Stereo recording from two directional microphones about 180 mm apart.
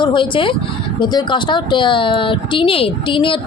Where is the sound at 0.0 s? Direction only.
25° left (ahead or behind).